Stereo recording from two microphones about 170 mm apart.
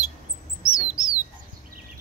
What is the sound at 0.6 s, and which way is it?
Chirp, 5° right (ahead or behind).